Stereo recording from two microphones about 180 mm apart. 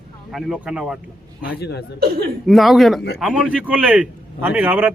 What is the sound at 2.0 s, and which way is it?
Speech, 60° right (ahead or behind).